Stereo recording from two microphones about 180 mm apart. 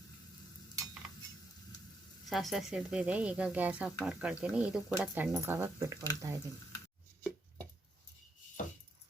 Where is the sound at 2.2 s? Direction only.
Centre (ahead or behind).